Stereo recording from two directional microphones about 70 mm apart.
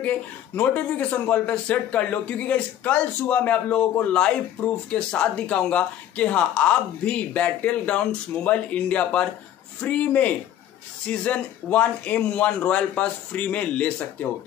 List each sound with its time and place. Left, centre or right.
0.0 s speech: left